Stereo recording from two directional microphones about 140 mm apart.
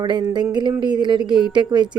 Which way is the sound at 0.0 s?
35° right (ahead or behind).